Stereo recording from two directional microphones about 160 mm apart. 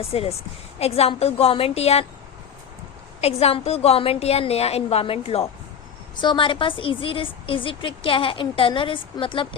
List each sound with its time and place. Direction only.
0.0 s a woman's voice: 40° left (ahead or behind)
3.2 s a woman's voice: 40° left (ahead or behind)